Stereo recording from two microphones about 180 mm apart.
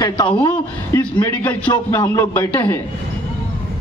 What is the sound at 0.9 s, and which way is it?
A man's voice, 10° left (ahead or behind).